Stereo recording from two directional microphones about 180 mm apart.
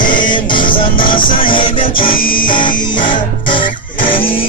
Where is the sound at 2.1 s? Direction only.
50° left (ahead or behind).